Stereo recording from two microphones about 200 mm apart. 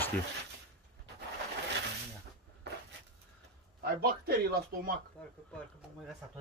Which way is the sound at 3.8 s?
50° right (ahead or behind).